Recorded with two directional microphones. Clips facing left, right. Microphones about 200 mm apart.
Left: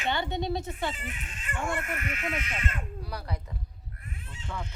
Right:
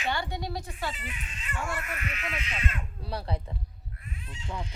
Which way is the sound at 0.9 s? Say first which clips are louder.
Left 1 dB; 50° left (ahead or behind).